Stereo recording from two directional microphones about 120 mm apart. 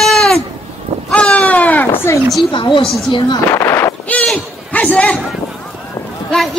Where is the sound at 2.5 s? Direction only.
40° left (ahead or behind).